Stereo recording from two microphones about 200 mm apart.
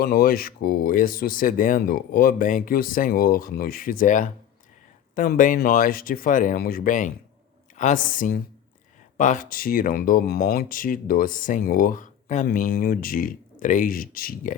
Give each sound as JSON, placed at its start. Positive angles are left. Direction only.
{"t": 0.0, "sound": "speech", "side_deg": 50}